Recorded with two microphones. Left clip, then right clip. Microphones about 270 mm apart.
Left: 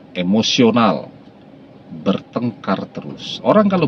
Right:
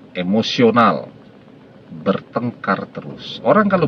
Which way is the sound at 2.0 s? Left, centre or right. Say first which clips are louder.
Right 1 dB; right.